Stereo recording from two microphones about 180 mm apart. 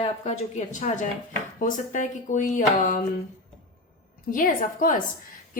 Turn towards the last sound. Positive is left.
turn(degrees=50)  # may be behind; listen again after turning